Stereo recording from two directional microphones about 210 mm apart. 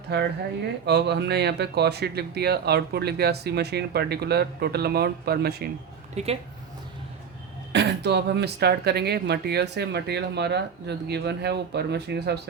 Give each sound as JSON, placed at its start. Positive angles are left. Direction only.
{"t": 0.9, "sound": "speech", "side_deg": -55}
{"t": 6.2, "sound": "speech", "side_deg": -30}
{"t": 7.7, "sound": "speech", "side_deg": -55}